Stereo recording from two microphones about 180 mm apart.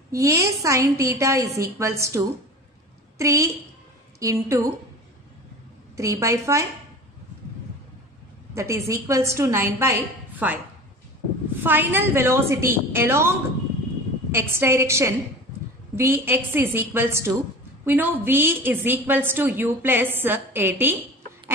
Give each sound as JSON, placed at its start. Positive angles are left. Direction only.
{"t": 0.1, "sound": "a woman's voice", "side_deg": -15}
{"t": 5.9, "sound": "a woman's voice", "side_deg": -15}
{"t": 8.5, "sound": "a woman's voice", "side_deg": -15}
{"t": 11.6, "sound": "a woman's voice", "side_deg": -10}